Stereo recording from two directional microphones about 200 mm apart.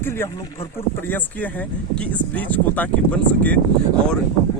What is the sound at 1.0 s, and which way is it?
Speech, 10° left (ahead or behind).